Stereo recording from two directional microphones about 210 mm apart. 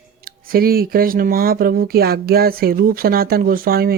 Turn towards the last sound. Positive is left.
turn(degrees=-45)  # may be behind; listen again after turning